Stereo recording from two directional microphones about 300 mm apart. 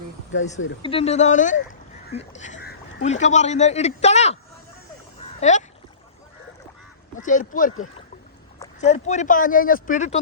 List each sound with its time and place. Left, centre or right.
0.8 s speech: centre
5.2 s a sound: left
7.2 s speech: left